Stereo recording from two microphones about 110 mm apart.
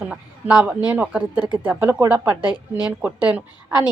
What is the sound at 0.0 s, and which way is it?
A woman's voice, 10° right (ahead or behind).